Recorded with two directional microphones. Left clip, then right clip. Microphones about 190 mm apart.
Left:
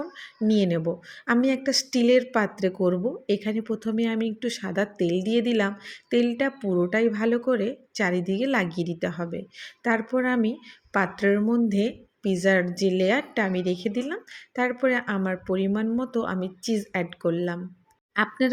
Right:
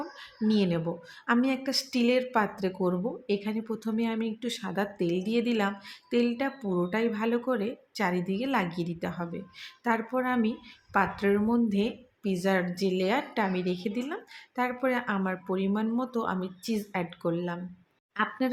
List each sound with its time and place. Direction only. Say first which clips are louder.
0.2 s a woman's voice: left 4 dB; 15° left (ahead or behind)